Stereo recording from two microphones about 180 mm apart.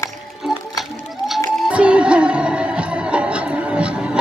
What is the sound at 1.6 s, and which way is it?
Music, 5° right (ahead or behind).